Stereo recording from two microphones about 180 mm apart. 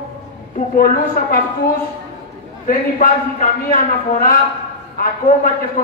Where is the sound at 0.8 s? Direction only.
55° left (ahead or behind).